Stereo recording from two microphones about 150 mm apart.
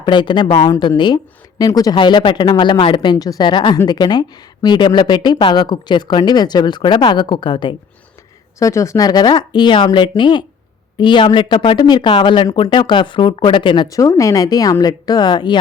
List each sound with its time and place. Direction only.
0.0 s speech: 30° left (ahead or behind)
8.5 s speech: 20° left (ahead or behind)